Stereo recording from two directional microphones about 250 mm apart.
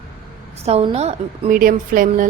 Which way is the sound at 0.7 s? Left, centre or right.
Right.